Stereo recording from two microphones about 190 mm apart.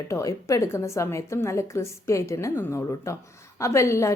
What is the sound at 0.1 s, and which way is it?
A woman's voice, 15° left (ahead or behind).